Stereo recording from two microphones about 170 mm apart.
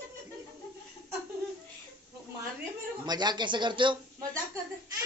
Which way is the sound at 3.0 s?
25° right (ahead or behind).